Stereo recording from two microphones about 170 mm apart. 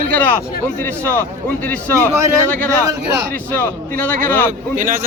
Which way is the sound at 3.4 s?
10° left (ahead or behind).